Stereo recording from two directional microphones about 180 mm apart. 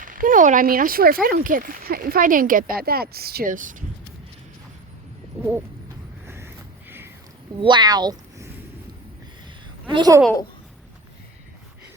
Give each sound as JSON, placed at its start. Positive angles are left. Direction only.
{"t": 0.0, "sound": "speech", "side_deg": -50}
{"t": 5.4, "sound": "a sound", "side_deg": -10}
{"t": 7.6, "sound": "speech", "side_deg": -25}
{"t": 9.9, "sound": "a child's voice", "side_deg": -25}